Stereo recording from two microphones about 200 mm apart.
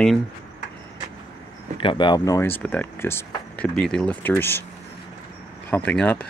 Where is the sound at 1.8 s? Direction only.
25° left (ahead or behind).